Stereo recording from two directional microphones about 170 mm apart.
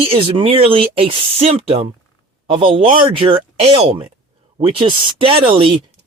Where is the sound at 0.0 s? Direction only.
35° right (ahead or behind).